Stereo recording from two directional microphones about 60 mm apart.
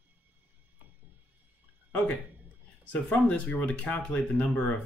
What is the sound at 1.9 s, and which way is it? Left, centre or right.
Speech, left.